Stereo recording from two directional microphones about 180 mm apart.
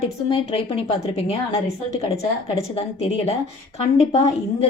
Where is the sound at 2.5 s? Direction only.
30° left (ahead or behind).